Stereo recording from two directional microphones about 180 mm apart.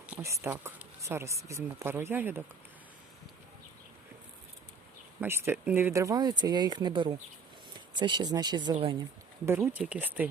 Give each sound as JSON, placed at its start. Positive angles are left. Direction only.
{"t": 0.1, "sound": "speech", "side_deg": -15}
{"t": 5.2, "sound": "speech", "side_deg": -10}
{"t": 9.5, "sound": "speech", "side_deg": -10}